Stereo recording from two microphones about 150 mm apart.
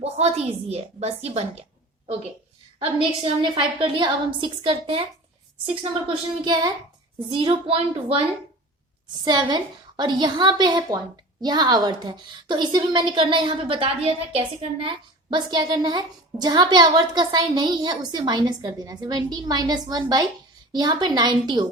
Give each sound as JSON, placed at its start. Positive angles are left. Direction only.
{"t": 0.0, "sound": "a woman's voice", "side_deg": -45}
{"t": 2.7, "sound": "a woman's voice", "side_deg": -40}
{"t": 6.4, "sound": "a woman's voice", "side_deg": -25}
{"t": 9.2, "sound": "a woman's voice", "side_deg": -30}